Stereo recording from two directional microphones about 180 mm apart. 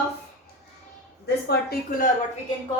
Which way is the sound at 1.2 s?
65° left (ahead or behind).